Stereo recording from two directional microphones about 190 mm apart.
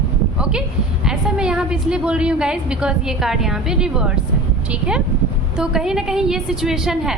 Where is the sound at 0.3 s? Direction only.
5° right (ahead or behind).